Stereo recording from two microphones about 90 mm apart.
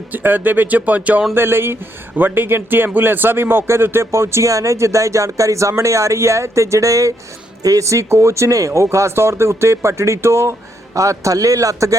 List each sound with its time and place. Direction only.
0.1 s speech: 20° right (ahead or behind); by 11.9 s 40° right (ahead or behind)